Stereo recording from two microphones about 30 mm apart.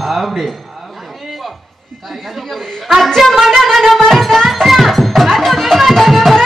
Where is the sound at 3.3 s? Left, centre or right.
Centre.